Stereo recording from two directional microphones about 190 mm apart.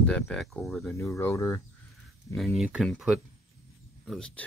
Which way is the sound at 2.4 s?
Centre (ahead or behind).